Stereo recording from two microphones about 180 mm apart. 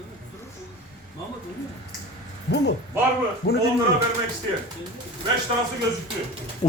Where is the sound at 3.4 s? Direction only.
60° left (ahead or behind).